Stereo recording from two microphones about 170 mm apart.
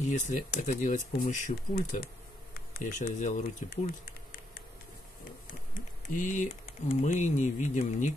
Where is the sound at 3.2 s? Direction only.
45° left (ahead or behind).